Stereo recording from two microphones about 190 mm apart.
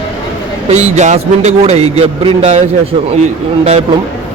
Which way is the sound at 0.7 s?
35° right (ahead or behind).